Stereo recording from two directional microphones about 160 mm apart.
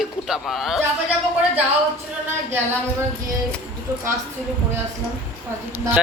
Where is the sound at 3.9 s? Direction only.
20° right (ahead or behind).